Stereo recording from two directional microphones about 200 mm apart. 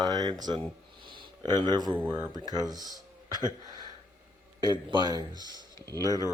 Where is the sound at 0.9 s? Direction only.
25° right (ahead or behind).